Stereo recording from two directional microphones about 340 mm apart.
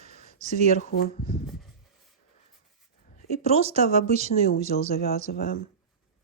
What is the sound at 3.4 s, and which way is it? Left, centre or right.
Speech, centre.